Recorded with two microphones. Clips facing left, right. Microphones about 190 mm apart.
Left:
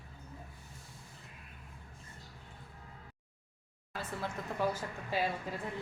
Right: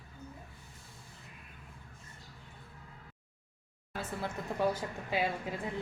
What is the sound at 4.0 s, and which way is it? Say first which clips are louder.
Speech: right 2 dB; 15° right (ahead or behind).